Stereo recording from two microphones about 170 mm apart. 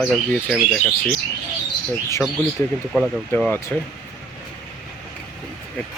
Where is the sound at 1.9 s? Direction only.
15° left (ahead or behind).